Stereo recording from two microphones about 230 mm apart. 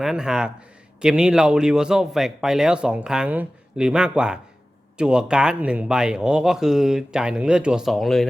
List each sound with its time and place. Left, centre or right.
0.0 s speech: centre